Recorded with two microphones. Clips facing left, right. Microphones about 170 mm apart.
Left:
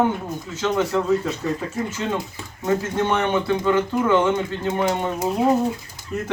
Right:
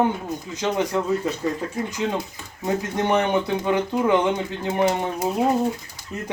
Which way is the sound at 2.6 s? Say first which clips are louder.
Left 2 dB; 15° right (ahead or behind).